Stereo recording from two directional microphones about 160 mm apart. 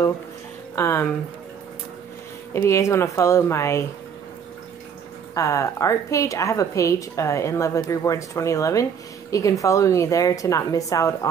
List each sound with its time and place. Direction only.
0.7 s speech: 15° left (ahead or behind)
2.5 s speech: 15° left (ahead or behind)
5.3 s a woman's voice: 20° left (ahead or behind)